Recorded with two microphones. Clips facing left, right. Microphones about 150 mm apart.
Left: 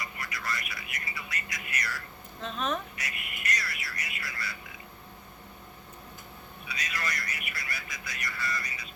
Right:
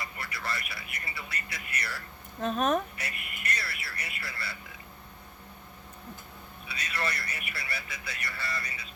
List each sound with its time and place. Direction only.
0.0 s speech: 30° right (ahead or behind)
2.4 s a woman's voice: 50° right (ahead or behind)
3.0 s speech: 30° right (ahead or behind)
6.7 s speech: 30° right (ahead or behind)